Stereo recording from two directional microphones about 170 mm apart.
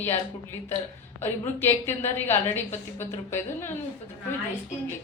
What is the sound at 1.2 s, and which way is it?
A man's voice, 15° left (ahead or behind).